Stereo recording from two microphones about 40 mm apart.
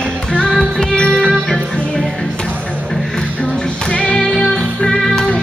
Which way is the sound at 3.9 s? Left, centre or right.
Left.